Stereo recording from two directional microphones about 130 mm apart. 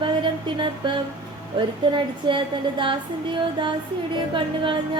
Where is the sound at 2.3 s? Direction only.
40° right (ahead or behind).